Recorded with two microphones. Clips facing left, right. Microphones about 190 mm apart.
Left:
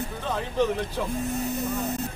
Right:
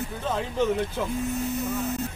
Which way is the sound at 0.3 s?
5° right (ahead or behind).